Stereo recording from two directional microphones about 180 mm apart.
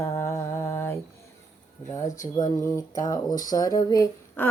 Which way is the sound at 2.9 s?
20° left (ahead or behind).